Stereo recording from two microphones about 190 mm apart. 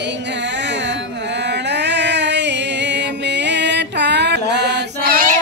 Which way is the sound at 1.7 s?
65° right (ahead or behind).